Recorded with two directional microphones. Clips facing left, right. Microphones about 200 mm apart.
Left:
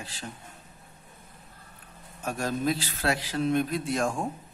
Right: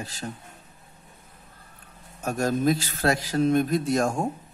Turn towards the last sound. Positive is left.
turn(degrees=-40)  # may be behind; listen again after turning